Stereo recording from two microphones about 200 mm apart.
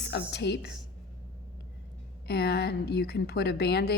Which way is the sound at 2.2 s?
55° left (ahead or behind).